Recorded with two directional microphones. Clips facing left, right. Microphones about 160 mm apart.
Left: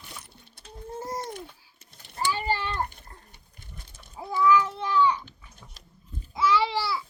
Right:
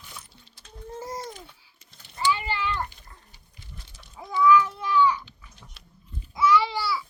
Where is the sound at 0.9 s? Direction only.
50° left (ahead or behind).